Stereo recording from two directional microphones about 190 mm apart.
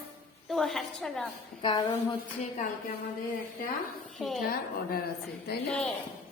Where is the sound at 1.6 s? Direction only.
25° left (ahead or behind).